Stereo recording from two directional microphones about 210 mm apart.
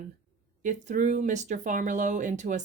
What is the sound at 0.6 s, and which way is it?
Speech, 35° right (ahead or behind).